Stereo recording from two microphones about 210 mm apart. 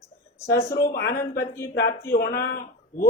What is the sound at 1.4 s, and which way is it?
Speech, 10° left (ahead or behind).